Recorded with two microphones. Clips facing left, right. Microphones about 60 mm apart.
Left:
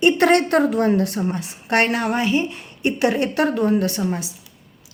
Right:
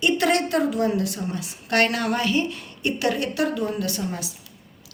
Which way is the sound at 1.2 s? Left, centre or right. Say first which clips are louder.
Left 5 dB; left.